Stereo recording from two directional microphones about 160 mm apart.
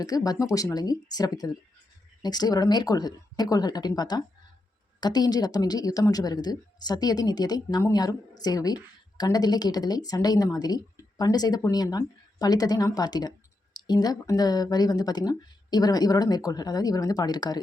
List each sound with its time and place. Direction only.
0.0 s a woman's voice: 25° left (ahead or behind)